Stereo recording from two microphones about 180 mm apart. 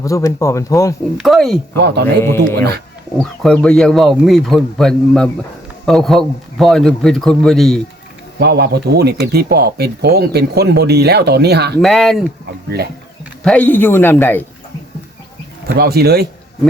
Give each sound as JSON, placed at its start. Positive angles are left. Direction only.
{"t": 0.0, "sound": "speech", "side_deg": 15}
{"t": 1.2, "sound": "a man's voice", "side_deg": 0}
{"t": 1.8, "sound": "speech", "side_deg": -65}
{"t": 2.2, "sound": "a man's voice", "side_deg": 15}
{"t": 8.4, "sound": "speech", "side_deg": -65}
{"t": 11.8, "sound": "a man's voice", "side_deg": 0}
{"t": 13.4, "sound": "speech", "side_deg": 5}
{"t": 15.8, "sound": "speech", "side_deg": -60}